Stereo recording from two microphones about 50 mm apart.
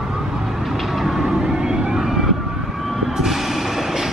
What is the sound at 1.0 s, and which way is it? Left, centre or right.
Vehicle, centre.